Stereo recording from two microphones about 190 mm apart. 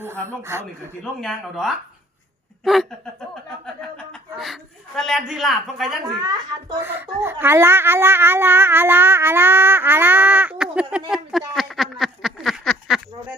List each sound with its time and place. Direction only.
0.0 s speech: 15° right (ahead or behind)
1.2 s a man's voice: centre (ahead or behind)
6.1 s speech: 20° right (ahead or behind); by 13.0 s centre (ahead or behind)